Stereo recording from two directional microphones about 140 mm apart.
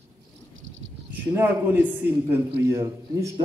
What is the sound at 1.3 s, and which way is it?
A man's voice, 15° right (ahead or behind).